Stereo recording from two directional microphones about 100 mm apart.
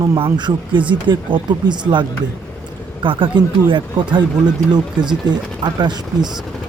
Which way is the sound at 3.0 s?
55° right (ahead or behind).